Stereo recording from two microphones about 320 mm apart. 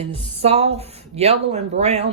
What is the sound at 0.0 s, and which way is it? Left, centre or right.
Speech, centre.